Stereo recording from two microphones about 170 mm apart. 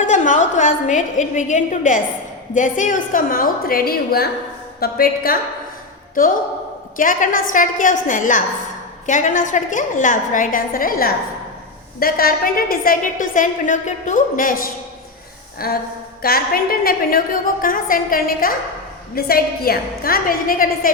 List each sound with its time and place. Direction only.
0.0 s a woman's voice: 45° left (ahead or behind)
15.5 s a sound: 60° left (ahead or behind)
16.2 s a woman's voice: 60° left (ahead or behind)